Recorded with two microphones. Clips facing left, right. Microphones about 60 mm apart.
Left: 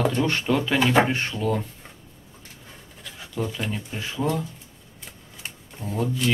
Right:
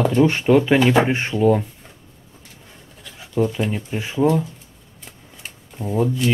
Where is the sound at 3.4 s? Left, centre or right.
Centre.